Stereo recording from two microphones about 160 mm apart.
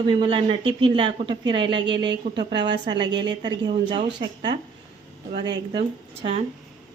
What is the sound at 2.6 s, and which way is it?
Speech, 90° right.